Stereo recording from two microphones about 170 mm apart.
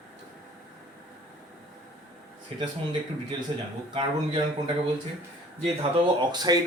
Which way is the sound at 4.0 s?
30° right (ahead or behind).